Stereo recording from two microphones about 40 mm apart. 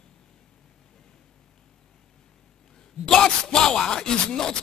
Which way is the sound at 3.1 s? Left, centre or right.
Centre.